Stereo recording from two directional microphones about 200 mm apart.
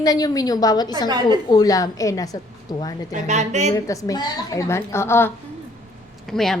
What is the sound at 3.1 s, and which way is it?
Speech, 35° right (ahead or behind).